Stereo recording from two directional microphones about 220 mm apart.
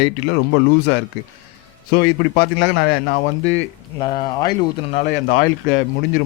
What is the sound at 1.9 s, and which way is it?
A man's voice, 45° left (ahead or behind).